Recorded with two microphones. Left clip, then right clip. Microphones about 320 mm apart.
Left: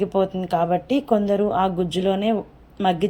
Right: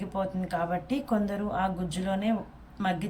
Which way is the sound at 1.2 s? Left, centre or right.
Centre.